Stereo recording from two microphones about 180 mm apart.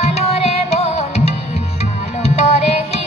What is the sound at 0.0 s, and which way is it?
Music, 35° left (ahead or behind).